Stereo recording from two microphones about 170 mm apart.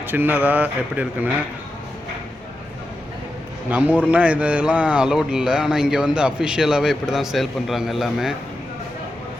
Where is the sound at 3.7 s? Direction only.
10° right (ahead or behind).